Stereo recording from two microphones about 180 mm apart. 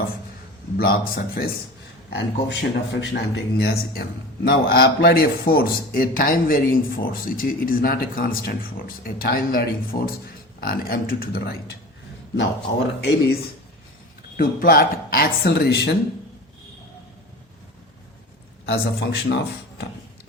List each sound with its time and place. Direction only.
0.8 s a man's voice: 55° left (ahead or behind)
2.0 s a man's voice: 65° left (ahead or behind)
13.0 s speech: 65° left (ahead or behind)
14.3 s a man's voice: 55° left (ahead or behind)
18.6 s speech: 70° left (ahead or behind)